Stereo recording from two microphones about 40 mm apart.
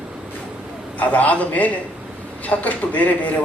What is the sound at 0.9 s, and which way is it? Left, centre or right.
A man's voice, left.